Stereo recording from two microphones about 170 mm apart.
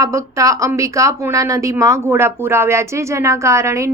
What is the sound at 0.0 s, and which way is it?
A woman's voice, 20° right (ahead or behind).